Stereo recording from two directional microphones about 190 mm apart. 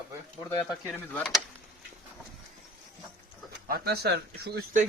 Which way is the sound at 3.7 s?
60° right (ahead or behind).